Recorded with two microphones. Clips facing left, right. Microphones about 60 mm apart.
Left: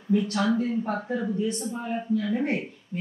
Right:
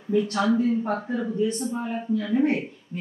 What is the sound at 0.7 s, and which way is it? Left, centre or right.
Speech, centre.